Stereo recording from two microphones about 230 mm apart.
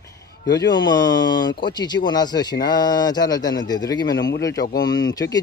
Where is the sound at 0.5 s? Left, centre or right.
Centre.